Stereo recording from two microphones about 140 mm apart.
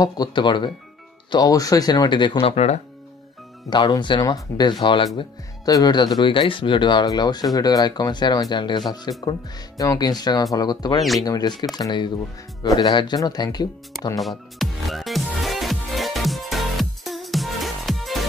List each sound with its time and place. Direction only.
0.0 s speech: 30° left (ahead or behind)
2.4 s speech: 50° left (ahead or behind)
3.7 s speech: 35° left (ahead or behind)
11.0 s speech: centre (ahead or behind)
11.2 s speech: 30° left (ahead or behind)
14.2 s music: centre (ahead or behind)